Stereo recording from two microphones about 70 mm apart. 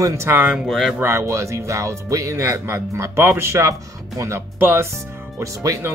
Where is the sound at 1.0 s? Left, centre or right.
Right.